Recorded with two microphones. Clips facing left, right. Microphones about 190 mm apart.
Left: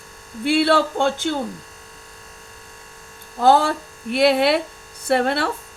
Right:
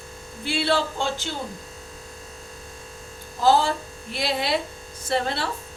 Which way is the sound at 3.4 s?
55° left (ahead or behind).